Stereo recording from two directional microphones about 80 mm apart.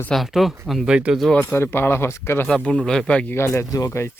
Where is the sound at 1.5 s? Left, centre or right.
Left.